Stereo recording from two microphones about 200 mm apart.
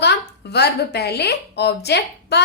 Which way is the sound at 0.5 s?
55° left (ahead or behind).